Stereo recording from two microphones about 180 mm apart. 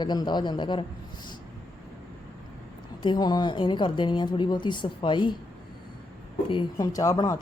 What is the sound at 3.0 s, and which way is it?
Speech, 25° left (ahead or behind).